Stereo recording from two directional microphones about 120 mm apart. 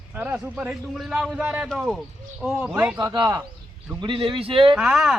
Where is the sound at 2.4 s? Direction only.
10° right (ahead or behind).